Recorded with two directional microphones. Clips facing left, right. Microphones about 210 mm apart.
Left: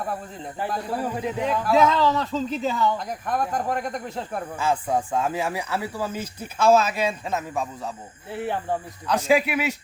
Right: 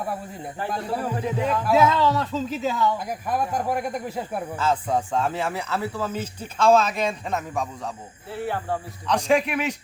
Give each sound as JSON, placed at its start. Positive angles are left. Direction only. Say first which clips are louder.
{"t": 0.0, "sound": "speech", "louder": "even", "side_deg": -10}
{"t": 1.1, "sound": "speech", "louder": "right 2 dB", "side_deg": 10}
{"t": 1.6, "sound": "speech", "louder": "even", "side_deg": -5}
{"t": 4.5, "sound": "speech", "louder": "even", "side_deg": 10}